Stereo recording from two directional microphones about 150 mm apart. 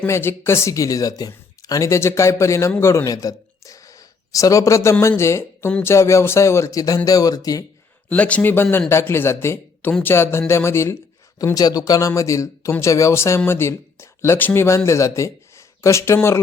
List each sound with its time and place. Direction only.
0.0 s speech: 15° left (ahead or behind)
8.1 s speech: 10° left (ahead or behind)